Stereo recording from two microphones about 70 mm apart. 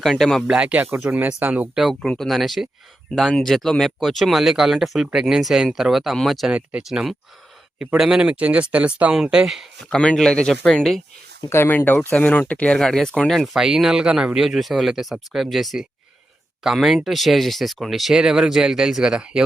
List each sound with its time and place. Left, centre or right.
0.0 s speech: centre
0.4 s speech: centre
2.0 s speech: centre
9.1 s speech: centre
9.9 s speech: centre
11.4 s speech: left; by 12.8 s centre
12.8 s speech: centre
14.3 s speech: centre